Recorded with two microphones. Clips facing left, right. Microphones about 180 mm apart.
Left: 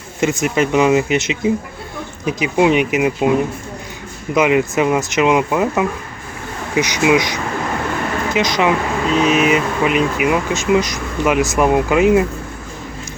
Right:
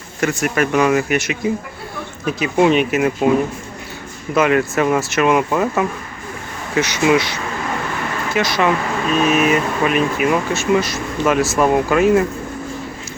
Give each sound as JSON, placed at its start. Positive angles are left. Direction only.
{"t": 0.2, "sound": "speech", "side_deg": 20}
{"t": 4.4, "sound": "speech", "side_deg": 15}